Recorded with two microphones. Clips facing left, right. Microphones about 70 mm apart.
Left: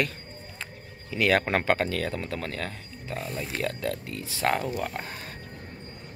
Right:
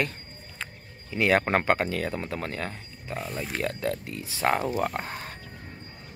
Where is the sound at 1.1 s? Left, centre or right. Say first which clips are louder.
Right 1 dB; right.